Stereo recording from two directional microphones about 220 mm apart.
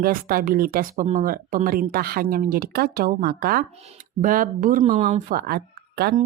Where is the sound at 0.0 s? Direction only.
40° right (ahead or behind).